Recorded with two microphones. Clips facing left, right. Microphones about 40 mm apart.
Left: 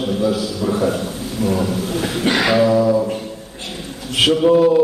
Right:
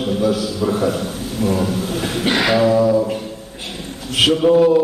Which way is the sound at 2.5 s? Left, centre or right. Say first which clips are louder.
Even; right.